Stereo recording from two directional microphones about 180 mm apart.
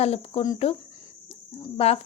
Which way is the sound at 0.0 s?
35° left (ahead or behind).